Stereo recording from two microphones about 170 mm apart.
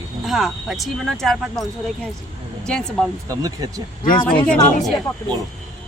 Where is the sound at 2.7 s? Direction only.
5° left (ahead or behind).